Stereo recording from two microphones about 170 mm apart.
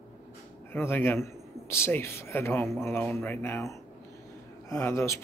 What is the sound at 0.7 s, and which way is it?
Speech, 15° left (ahead or behind).